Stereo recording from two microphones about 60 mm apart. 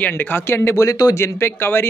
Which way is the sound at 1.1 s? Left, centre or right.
Left.